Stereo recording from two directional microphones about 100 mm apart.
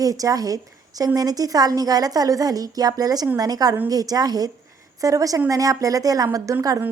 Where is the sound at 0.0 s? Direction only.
35° right (ahead or behind).